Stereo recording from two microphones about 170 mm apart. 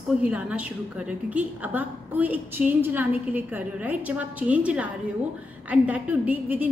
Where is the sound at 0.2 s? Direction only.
10° right (ahead or behind).